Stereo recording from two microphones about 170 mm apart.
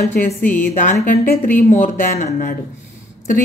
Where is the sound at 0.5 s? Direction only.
50° left (ahead or behind).